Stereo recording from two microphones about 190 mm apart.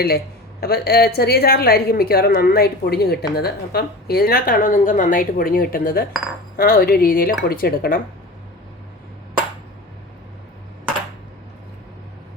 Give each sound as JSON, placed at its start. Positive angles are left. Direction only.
{"t": 0.6, "sound": "a woman's voice", "side_deg": 55}